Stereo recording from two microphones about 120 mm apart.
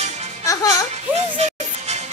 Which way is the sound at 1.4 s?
65° right (ahead or behind).